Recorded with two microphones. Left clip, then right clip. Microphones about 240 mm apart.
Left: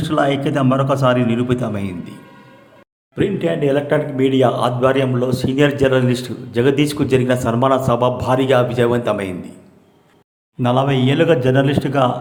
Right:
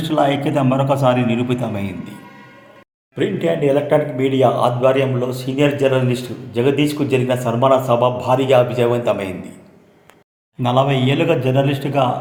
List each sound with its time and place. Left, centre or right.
0.0 s speech: centre
3.2 s speech: centre
10.6 s speech: centre